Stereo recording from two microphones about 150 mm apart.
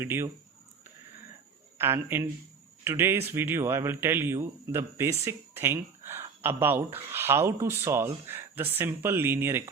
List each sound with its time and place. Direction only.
0.0 s a man's voice: 15° right (ahead or behind)
1.8 s a man's voice: 15° right (ahead or behind)